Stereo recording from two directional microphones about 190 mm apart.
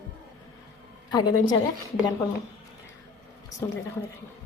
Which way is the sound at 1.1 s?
20° left (ahead or behind).